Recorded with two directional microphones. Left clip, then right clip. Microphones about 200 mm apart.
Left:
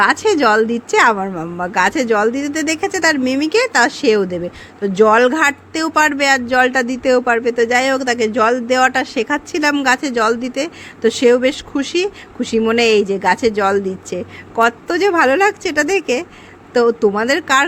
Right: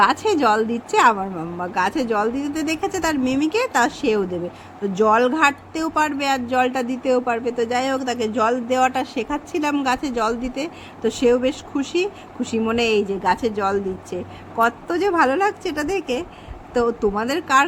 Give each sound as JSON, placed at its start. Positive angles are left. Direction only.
{"t": 0.0, "sound": "speech", "side_deg": 30}